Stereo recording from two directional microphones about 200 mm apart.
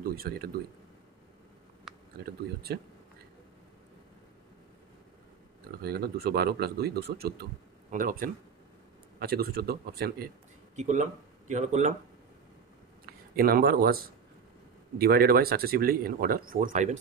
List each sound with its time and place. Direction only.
0.0 s a man's voice: 50° right (ahead or behind)
2.7 s speech: 55° right (ahead or behind)
5.8 s speech: 50° right (ahead or behind)
10.8 s speech: 40° right (ahead or behind)
13.0 s speech: 45° right (ahead or behind)